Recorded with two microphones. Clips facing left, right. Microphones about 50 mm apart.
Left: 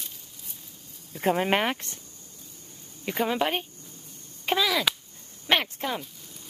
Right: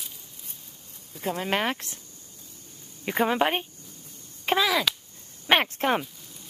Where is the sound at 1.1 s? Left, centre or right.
Left.